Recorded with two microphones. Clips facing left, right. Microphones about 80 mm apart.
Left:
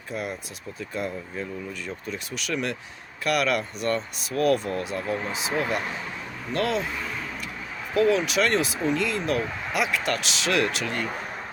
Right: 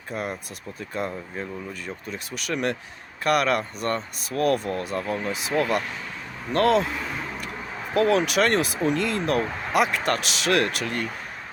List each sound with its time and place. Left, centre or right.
0.1 s speech: right
7.9 s speech: right